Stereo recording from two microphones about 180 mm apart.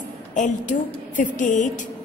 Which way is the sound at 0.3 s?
45° left (ahead or behind).